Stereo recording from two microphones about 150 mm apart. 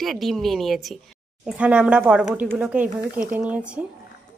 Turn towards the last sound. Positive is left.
turn(degrees=-10)  # may be behind; listen again after turning